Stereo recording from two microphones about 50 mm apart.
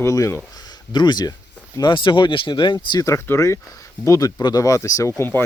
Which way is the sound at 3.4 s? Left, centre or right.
Left.